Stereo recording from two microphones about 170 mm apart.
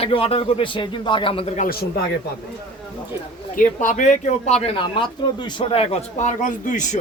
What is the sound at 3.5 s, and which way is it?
Speech, 50° left (ahead or behind).